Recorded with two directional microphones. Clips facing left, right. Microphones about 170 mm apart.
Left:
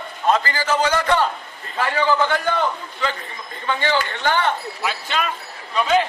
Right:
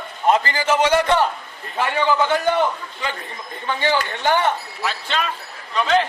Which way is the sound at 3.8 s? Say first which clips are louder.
Right 2 dB; 15° right (ahead or behind).